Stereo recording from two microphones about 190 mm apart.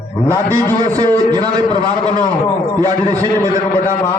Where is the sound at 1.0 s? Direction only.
20° right (ahead or behind).